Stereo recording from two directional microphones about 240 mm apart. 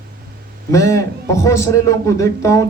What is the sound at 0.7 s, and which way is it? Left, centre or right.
A man's voice, centre.